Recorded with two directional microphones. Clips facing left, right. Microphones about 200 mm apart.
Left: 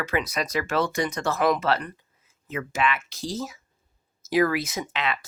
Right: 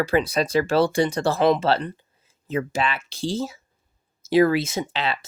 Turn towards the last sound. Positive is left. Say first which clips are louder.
# right 3 dB
turn(degrees=-30)  # may be behind; listen again after turning